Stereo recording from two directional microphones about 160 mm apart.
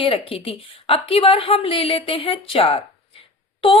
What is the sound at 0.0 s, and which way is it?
Speech, 35° left (ahead or behind).